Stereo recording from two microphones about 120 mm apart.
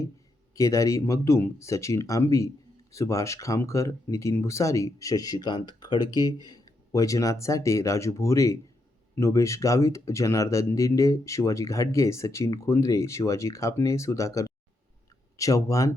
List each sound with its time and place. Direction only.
0.5 s speech: 25° left (ahead or behind)